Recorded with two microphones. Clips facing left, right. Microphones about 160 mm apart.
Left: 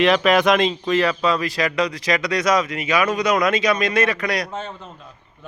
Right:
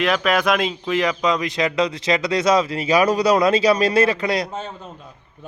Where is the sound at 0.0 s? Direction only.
Centre (ahead or behind); by 4.5 s 25° right (ahead or behind).